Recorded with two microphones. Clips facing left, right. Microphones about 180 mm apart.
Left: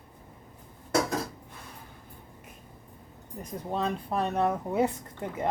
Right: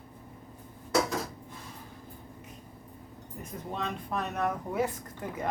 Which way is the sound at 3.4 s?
35° left (ahead or behind).